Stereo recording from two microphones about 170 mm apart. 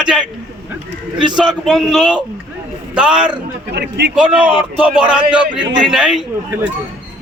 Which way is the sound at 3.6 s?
75° right (ahead or behind).